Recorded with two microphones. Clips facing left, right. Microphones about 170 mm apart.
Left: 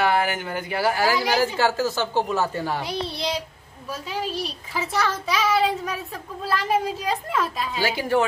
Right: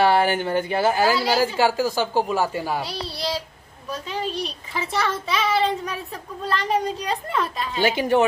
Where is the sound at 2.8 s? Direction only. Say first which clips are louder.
Left 1 dB; 20° left (ahead or behind).